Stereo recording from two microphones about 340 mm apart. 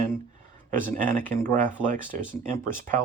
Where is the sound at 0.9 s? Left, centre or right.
Right.